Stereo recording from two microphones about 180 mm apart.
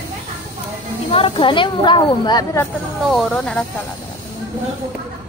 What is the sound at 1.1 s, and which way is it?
Speech, 30° left (ahead or behind).